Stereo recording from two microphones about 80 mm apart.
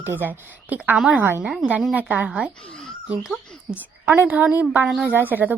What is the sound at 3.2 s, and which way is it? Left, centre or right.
Speech, centre.